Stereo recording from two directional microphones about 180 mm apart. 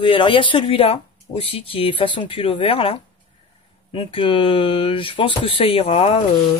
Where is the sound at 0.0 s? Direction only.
30° left (ahead or behind).